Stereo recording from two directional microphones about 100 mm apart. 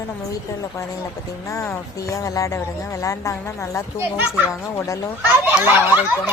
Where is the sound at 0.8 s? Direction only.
30° left (ahead or behind).